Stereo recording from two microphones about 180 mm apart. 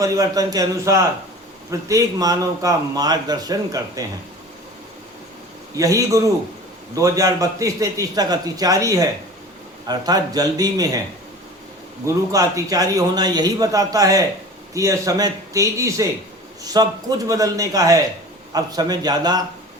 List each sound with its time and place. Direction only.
0.0 s a man's voice: 20° right (ahead or behind)
5.7 s a man's voice: 20° right (ahead or behind)
12.0 s a man's voice: 20° right (ahead or behind)